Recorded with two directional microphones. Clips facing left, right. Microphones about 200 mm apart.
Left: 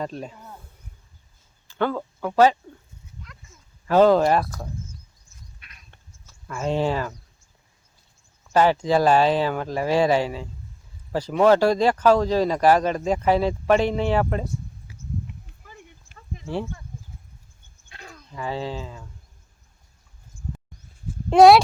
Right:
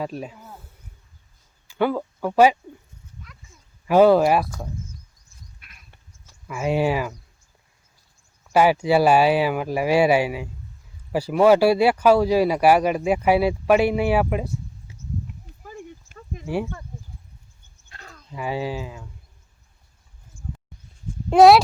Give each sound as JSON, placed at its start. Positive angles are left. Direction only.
{"t": 0.0, "sound": "speech", "side_deg": -5}
{"t": 1.6, "sound": "speech", "side_deg": -10}
{"t": 3.8, "sound": "speech", "side_deg": -10}
{"t": 5.5, "sound": "duck", "side_deg": 0}
{"t": 6.2, "sound": "speech", "side_deg": -10}
{"t": 8.5, "sound": "speech", "side_deg": -10}
{"t": 14.9, "sound": "a sound", "side_deg": -25}
{"t": 15.6, "sound": "a sound", "side_deg": -45}
{"t": 17.8, "sound": "a sound", "side_deg": 15}
{"t": 18.3, "sound": "speech", "side_deg": -15}
{"t": 21.2, "sound": "speech", "side_deg": 0}